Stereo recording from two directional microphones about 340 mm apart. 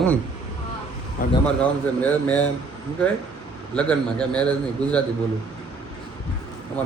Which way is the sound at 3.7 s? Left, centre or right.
Centre.